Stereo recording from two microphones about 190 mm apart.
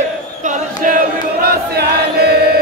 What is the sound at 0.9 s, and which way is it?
Chant, 50° right (ahead or behind).